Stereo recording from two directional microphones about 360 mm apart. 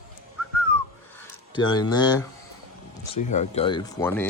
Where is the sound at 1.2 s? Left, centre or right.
Centre.